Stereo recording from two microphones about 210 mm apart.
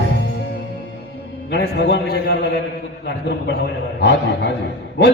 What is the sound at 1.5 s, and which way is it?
Speech, 55° left (ahead or behind).